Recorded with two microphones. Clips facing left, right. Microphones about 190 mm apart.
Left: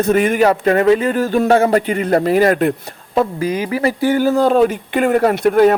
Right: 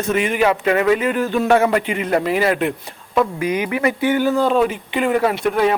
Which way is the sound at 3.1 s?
30° left (ahead or behind).